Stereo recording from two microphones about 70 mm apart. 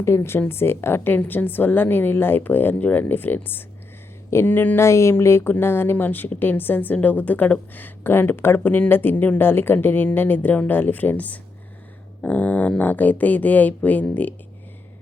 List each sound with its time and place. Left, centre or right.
0.0 s a woman's voice: left
4.8 s a woman's voice: left